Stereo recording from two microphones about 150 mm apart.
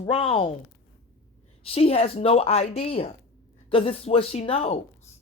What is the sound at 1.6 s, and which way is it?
A woman's voice, 40° left (ahead or behind).